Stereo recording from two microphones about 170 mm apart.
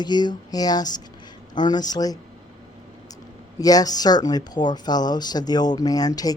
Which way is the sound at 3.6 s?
20° left (ahead or behind).